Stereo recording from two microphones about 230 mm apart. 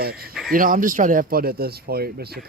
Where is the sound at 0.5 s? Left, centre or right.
Right.